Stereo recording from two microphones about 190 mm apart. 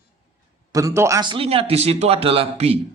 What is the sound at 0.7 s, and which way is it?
Speech, 15° right (ahead or behind).